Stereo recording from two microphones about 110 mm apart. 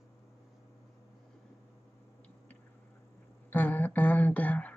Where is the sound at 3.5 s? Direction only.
15° left (ahead or behind).